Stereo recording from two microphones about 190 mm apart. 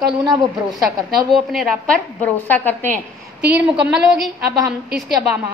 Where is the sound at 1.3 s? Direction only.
Centre (ahead or behind).